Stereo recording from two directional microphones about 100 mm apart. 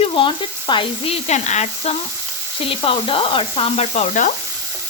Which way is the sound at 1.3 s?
90° left.